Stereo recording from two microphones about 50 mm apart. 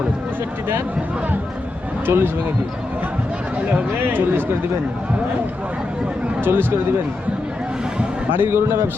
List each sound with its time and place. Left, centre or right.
2.0 s speech: right
4.0 s speech: right
6.4 s speech: right
8.3 s speech: right